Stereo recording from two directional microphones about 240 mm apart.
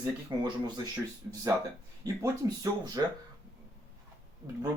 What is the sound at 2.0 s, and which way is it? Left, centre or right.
Speech, centre.